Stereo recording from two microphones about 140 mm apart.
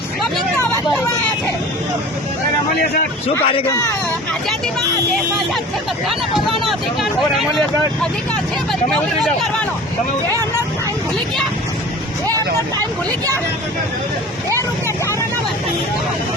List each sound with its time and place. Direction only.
3.4 s speech: 45° left (ahead or behind)
3.7 s speech: 25° left (ahead or behind)
6.7 s speech: centre (ahead or behind)
12.8 s speech: 25° right (ahead or behind)